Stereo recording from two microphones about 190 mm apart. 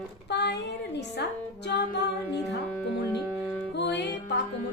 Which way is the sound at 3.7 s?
65° left (ahead or behind).